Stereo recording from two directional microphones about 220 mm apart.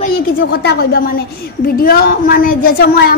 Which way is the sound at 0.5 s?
45° left (ahead or behind).